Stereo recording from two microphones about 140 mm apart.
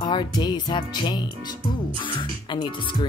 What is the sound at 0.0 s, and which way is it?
Speech, 30° left (ahead or behind).